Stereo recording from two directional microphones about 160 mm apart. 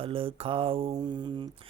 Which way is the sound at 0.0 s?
35° right (ahead or behind).